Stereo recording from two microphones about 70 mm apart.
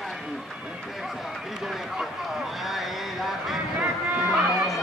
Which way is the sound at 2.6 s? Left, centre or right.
Centre.